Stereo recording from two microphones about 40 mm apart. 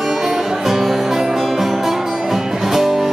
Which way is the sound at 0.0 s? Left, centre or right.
Centre.